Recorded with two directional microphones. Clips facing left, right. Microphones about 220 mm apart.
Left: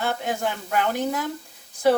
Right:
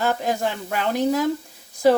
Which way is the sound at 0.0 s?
40° right (ahead or behind).